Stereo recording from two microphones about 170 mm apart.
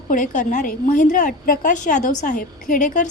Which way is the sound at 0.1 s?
50° left (ahead or behind).